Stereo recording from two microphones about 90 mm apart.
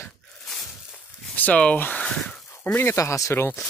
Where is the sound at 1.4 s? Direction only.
15° left (ahead or behind).